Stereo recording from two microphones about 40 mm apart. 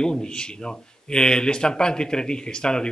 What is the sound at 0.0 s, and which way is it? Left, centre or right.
A man's voice, centre.